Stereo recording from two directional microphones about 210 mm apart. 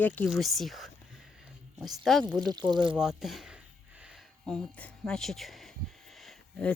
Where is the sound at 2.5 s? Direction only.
20° right (ahead or behind).